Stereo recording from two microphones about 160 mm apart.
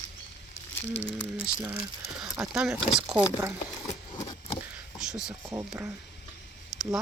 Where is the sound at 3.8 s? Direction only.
20° left (ahead or behind).